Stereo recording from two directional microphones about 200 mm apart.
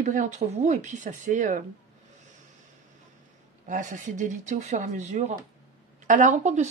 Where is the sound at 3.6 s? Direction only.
40° right (ahead or behind).